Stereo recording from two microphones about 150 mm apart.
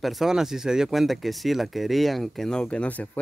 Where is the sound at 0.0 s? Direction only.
Centre (ahead or behind).